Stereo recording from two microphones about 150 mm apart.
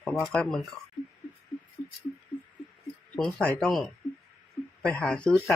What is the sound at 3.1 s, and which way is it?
Speech, 5° left (ahead or behind).